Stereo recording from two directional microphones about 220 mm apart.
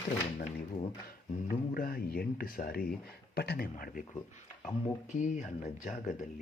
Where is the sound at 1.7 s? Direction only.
40° left (ahead or behind).